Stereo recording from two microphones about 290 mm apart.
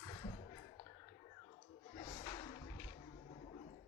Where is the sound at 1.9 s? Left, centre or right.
Centre.